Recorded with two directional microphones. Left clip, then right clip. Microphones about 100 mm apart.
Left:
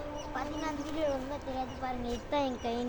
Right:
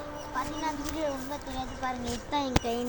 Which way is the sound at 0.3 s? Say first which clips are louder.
Right 5 dB; 25° left (ahead or behind).